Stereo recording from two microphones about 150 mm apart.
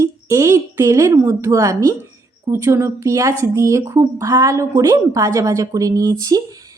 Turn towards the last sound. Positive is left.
turn(degrees=-25)  # may be behind; listen again after turning